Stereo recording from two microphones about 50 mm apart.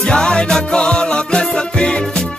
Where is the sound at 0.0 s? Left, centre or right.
Centre.